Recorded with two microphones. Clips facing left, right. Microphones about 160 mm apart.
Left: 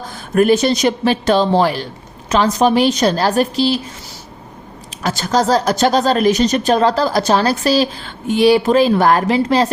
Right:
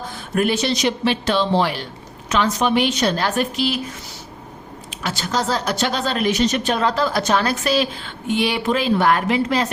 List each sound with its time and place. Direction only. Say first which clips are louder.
0.3 s speech: left 7 dB; 45° left (ahead or behind)
4.9 s speech: left 6 dB; 40° left (ahead or behind)